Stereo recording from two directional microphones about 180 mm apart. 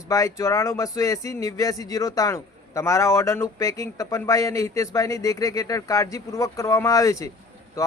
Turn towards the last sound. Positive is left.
turn(degrees=20)  # may be behind; listen again after turning